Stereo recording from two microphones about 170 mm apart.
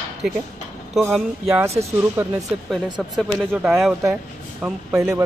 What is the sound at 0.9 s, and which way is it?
Speech, centre (ahead or behind).